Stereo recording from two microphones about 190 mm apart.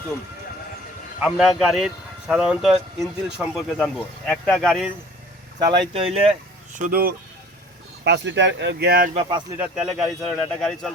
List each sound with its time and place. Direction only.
1.2 s speech: centre (ahead or behind)
5.5 s speech: 20° right (ahead or behind)
6.7 s speech: 45° right (ahead or behind)
8.0 s speech: 65° right (ahead or behind)
9.6 s speech: 5° right (ahead or behind)